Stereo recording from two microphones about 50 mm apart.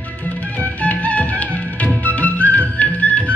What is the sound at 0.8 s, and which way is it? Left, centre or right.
Music, left.